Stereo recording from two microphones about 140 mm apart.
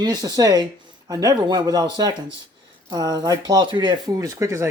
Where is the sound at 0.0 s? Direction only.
30° right (ahead or behind).